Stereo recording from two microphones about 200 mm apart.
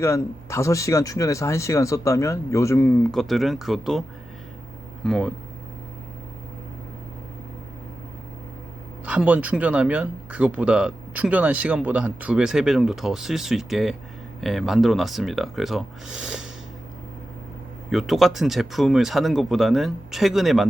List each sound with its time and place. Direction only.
0.0 s speech: 15° left (ahead or behind)
5.0 s speech: centre (ahead or behind)
9.0 s speech: 5° right (ahead or behind)
17.9 s speech: centre (ahead or behind)